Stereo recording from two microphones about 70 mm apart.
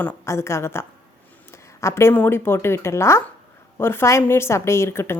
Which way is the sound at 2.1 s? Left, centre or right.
Left.